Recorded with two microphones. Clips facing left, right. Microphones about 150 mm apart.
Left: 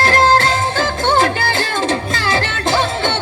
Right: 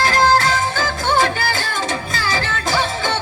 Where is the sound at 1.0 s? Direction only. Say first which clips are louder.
Left 3 dB; 35° left (ahead or behind).